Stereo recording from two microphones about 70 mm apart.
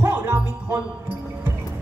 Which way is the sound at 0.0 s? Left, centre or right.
Right.